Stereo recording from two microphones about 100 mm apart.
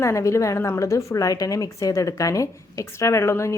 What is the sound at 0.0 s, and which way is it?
A woman's voice, 30° left (ahead or behind).